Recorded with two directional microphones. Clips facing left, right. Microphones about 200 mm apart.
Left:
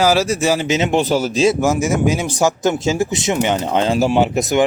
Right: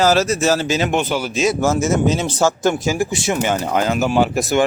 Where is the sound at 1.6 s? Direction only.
15° left (ahead or behind).